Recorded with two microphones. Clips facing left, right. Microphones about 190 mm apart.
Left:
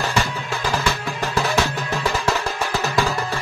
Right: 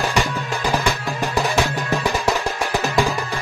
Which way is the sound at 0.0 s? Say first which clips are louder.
Right 2 dB; 15° right (ahead or behind).